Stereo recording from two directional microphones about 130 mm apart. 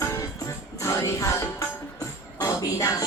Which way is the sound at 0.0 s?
25° left (ahead or behind).